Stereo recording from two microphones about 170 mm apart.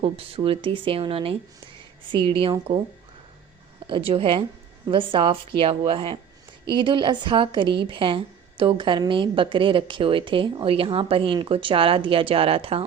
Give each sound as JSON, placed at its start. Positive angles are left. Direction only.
{"t": 0.0, "sound": "a woman's voice", "side_deg": -35}
{"t": 3.8, "sound": "a woman's voice", "side_deg": -30}